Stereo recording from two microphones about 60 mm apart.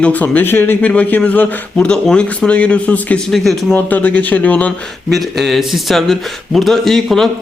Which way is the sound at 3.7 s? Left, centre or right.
Left.